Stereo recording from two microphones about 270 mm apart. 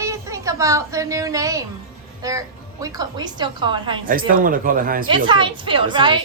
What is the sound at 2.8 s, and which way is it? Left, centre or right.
A woman's voice, centre.